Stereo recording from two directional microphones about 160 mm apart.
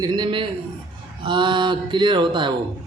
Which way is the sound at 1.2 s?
30° right (ahead or behind).